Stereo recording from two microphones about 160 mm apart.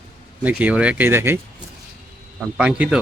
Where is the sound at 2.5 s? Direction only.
5° right (ahead or behind).